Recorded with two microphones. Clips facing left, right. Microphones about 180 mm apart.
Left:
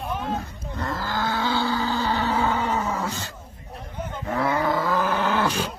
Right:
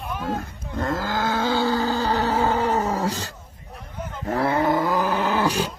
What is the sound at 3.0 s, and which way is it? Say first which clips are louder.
Roaring cats: right 4 dB; 35° right (ahead or behind).